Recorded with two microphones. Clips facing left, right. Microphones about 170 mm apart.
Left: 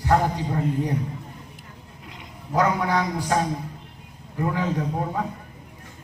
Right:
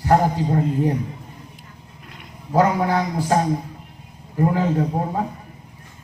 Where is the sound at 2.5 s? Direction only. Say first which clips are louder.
Right 4 dB; 30° right (ahead or behind).